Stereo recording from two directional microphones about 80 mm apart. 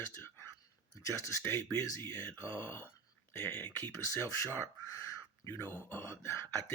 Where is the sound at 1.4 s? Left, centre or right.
Left.